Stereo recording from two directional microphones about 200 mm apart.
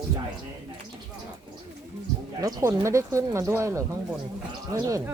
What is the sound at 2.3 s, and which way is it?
Speech, 15° right (ahead or behind).